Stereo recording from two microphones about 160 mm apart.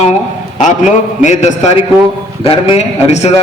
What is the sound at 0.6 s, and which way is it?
A man's voice, 50° left (ahead or behind).